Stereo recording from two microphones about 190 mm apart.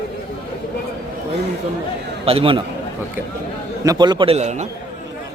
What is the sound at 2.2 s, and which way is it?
Speech, 30° right (ahead or behind).